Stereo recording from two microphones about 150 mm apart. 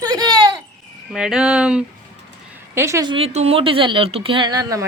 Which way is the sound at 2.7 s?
20° right (ahead or behind).